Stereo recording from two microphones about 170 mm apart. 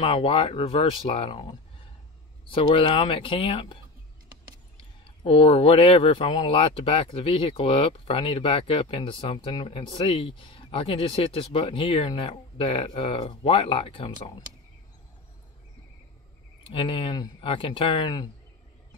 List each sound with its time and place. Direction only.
0.0 s speech: 35° left (ahead or behind)
5.0 s speech: 30° left (ahead or behind)
16.6 s speech: 30° left (ahead or behind)